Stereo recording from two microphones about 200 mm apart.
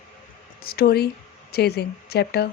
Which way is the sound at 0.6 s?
50° left (ahead or behind).